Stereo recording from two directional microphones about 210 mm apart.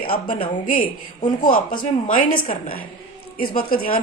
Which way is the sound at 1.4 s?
40° left (ahead or behind).